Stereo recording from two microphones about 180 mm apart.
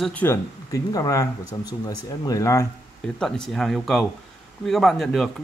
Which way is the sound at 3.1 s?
5° left (ahead or behind).